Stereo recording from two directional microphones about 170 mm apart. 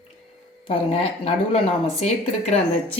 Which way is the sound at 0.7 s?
35° left (ahead or behind).